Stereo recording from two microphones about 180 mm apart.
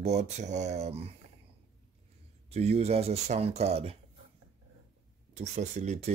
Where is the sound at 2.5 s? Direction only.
35° right (ahead or behind).